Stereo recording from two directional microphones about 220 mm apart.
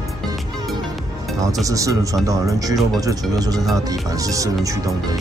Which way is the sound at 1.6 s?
15° right (ahead or behind).